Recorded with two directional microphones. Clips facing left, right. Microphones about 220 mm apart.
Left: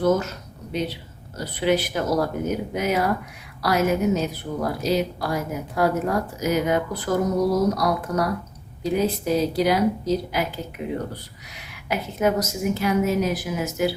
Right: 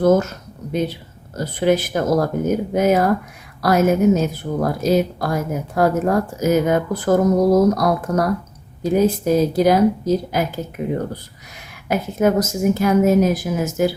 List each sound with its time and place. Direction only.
0.0 s a woman's voice: 45° right (ahead or behind)